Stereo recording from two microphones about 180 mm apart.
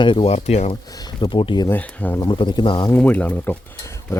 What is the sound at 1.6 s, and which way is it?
Speech, 10° left (ahead or behind).